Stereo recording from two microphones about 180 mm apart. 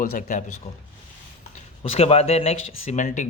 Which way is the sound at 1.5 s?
35° left (ahead or behind).